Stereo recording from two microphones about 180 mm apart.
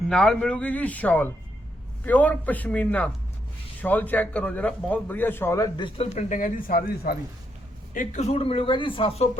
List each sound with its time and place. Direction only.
0.1 s a man's voice: 5° left (ahead or behind); by 6.1 s 25° left (ahead or behind)
6.1 s speech: 45° left (ahead or behind)
7.9 s a man's voice: 40° left (ahead or behind)